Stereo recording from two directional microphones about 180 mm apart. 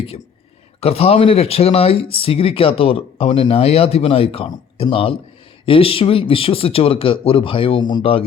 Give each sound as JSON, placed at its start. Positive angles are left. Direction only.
{"t": 0.8, "sound": "speech", "side_deg": 35}